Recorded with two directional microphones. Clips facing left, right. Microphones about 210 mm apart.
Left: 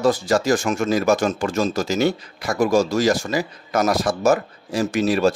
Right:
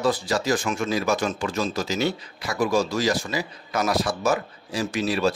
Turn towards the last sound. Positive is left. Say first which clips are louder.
# left 5 dB
turn(degrees=45)  # may be behind; listen again after turning